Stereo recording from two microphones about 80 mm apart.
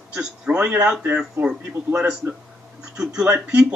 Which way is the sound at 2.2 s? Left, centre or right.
Right.